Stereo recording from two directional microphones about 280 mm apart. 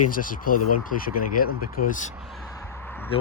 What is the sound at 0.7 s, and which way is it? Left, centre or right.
Speech, left.